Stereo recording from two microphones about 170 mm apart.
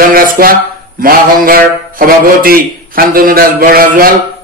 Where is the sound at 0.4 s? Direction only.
55° right (ahead or behind).